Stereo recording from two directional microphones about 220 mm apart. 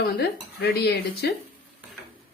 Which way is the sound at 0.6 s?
45° left (ahead or behind).